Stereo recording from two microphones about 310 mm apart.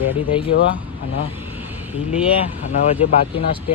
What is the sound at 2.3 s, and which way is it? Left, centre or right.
Speech, left.